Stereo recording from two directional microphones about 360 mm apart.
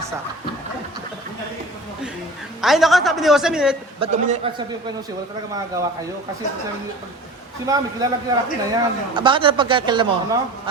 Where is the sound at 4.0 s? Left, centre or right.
Centre.